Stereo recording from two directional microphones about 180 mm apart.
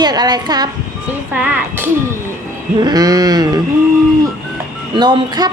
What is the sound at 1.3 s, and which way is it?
Speech, 10° right (ahead or behind).